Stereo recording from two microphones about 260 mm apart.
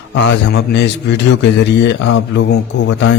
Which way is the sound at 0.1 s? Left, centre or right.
Left.